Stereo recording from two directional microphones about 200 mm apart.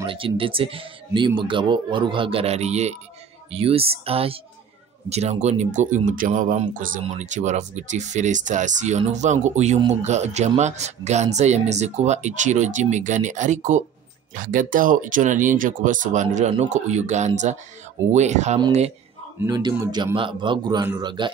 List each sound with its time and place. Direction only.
0.0 s speech: 25° right (ahead or behind)
19.4 s speech: 20° right (ahead or behind)